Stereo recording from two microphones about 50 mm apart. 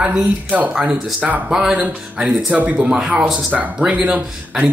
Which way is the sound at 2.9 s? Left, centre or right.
Centre.